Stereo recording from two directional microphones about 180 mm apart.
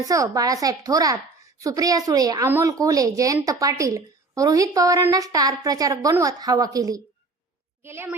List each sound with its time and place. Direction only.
0.0 s a woman's voice: 20° right (ahead or behind)